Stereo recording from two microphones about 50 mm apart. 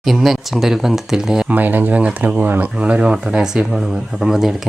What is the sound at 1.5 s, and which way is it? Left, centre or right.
Speech, right.